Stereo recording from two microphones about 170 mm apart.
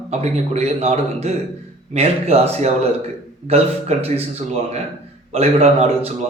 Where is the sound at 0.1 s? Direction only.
40° right (ahead or behind).